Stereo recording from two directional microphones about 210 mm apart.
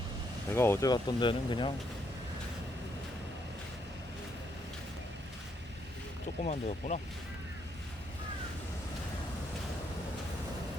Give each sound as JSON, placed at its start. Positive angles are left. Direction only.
{"t": 0.5, "sound": "speech", "side_deg": 10}
{"t": 6.4, "sound": "speech", "side_deg": 35}